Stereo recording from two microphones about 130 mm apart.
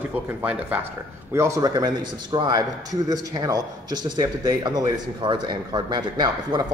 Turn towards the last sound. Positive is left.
turn(degrees=-35)  # may be behind; listen again after turning